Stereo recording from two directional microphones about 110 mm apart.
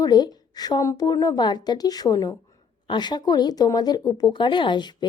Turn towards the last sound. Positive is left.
turn(degrees=45)  # may be behind; listen again after turning